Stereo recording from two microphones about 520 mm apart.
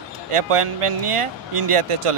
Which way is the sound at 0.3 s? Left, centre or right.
Right.